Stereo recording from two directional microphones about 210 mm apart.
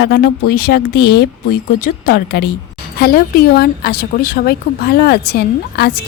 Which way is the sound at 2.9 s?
45° left (ahead or behind).